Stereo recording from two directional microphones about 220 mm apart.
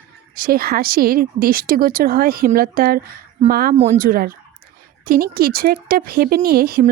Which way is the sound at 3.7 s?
30° right (ahead or behind).